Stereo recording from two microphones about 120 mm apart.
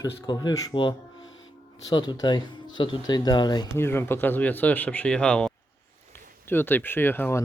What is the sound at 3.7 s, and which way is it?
Speech, 20° left (ahead or behind).